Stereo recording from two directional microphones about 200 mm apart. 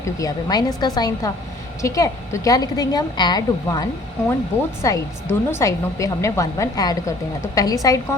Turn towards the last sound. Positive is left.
turn(degrees=15)  # may be behind; listen again after turning